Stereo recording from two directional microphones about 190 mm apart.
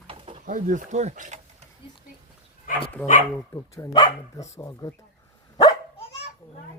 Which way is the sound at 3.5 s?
15° left (ahead or behind).